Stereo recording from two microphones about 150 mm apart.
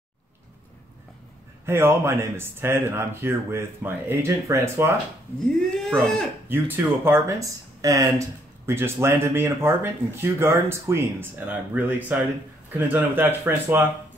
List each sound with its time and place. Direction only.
1.7 s speech: 15° right (ahead or behind)
5.7 s speech: 5° left (ahead or behind)
6.5 s speech: 15° right (ahead or behind)